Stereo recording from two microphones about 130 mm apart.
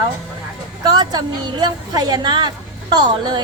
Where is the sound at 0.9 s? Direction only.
35° right (ahead or behind).